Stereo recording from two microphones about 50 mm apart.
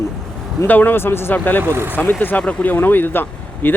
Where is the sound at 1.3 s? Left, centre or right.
Left.